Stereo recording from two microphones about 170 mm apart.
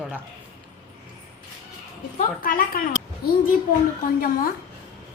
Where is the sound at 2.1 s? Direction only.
55° left (ahead or behind).